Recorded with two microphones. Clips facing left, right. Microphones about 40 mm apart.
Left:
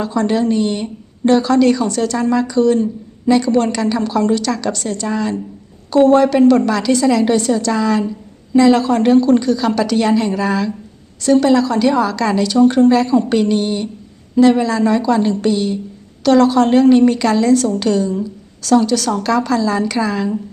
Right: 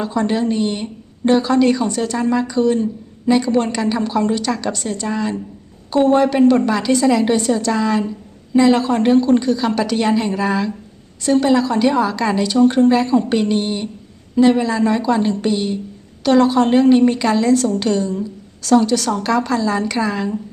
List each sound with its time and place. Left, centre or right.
0.0 s a woman's voice: centre